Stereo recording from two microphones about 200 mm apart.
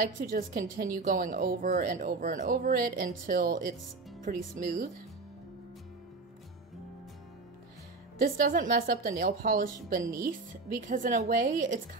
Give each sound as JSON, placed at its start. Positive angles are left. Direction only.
{"t": 0.0, "sound": "a woman's voice", "side_deg": -45}
{"t": 8.2, "sound": "a woman's voice", "side_deg": -45}